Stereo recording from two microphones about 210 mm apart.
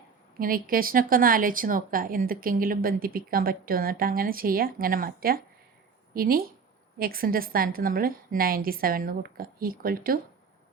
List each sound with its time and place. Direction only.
0.3 s speech: 40° right (ahead or behind)